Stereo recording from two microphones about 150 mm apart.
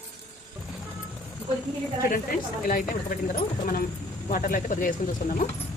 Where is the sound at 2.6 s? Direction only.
65° left (ahead or behind).